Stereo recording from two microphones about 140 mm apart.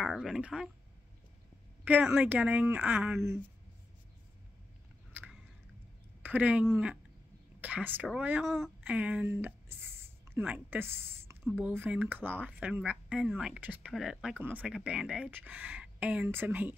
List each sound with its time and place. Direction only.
0.1 s speech: centre (ahead or behind)
1.9 s speech: 10° right (ahead or behind)
5.1 s chewing: 10° right (ahead or behind)
6.2 s speech: 10° right (ahead or behind)
8.8 s speech: 10° right (ahead or behind)